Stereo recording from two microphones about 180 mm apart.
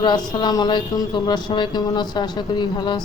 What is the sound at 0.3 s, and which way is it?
Speech, 25° left (ahead or behind).